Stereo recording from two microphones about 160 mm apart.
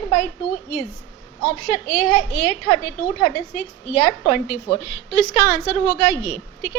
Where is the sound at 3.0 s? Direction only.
55° left (ahead or behind).